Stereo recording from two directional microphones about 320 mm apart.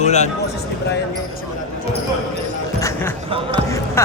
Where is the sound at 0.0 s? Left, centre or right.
Left.